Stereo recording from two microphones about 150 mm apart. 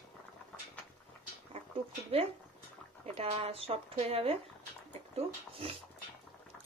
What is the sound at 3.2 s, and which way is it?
Speech, 40° right (ahead or behind).